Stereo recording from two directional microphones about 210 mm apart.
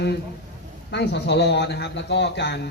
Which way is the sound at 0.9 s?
55° left (ahead or behind).